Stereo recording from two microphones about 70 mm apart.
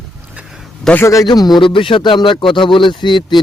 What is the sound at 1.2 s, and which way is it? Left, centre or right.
Speech, left.